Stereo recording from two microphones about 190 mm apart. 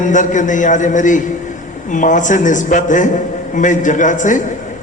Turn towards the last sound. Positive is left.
turn(degrees=40)  # may be behind; listen again after turning